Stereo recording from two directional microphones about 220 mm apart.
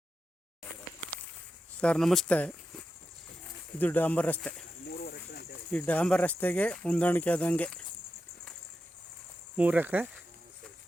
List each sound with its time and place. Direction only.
1.8 s speech: 5° left (ahead or behind)
4.9 s cricket: 45° left (ahead or behind)
5.7 s speech: 5° left (ahead or behind)
9.6 s speech: 5° right (ahead or behind)